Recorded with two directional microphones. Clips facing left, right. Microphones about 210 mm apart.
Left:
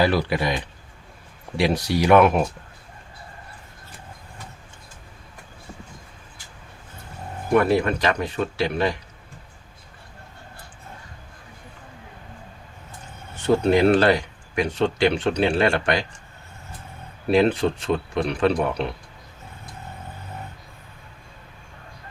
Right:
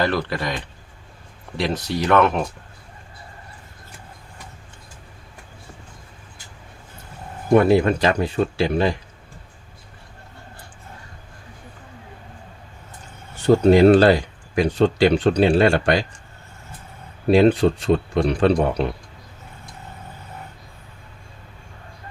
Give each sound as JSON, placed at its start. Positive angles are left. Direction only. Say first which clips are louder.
{"t": 0.0, "sound": "speech", "louder": "left 2 dB", "side_deg": 10}
{"t": 7.5, "sound": "speech", "louder": "right 4 dB", "side_deg": -25}
{"t": 13.5, "sound": "speech", "louder": "right 5 dB", "side_deg": -35}
{"t": 17.3, "sound": "speech", "louder": "right 4 dB", "side_deg": -35}